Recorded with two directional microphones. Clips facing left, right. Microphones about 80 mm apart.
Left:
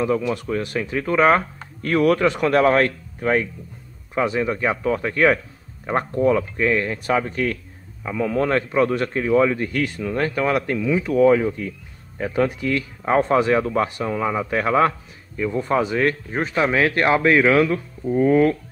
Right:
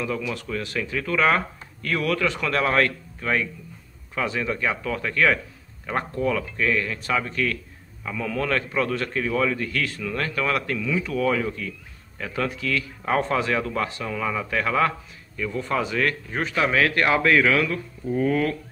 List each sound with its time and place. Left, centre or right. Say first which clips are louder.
0.0 s speech: left 7 dB; left